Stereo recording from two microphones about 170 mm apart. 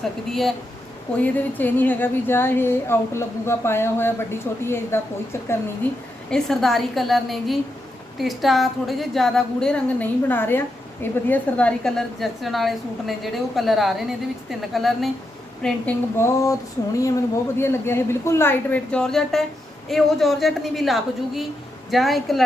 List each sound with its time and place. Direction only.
0.0 s a woman's voice: centre (ahead or behind)
6.3 s a woman's voice: centre (ahead or behind)
15.6 s speech: 10° left (ahead or behind)
17.6 s a woman's voice: 15° left (ahead or behind)